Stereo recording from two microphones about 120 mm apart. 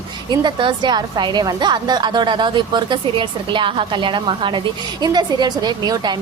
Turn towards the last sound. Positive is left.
turn(degrees=-35)  # may be behind; listen again after turning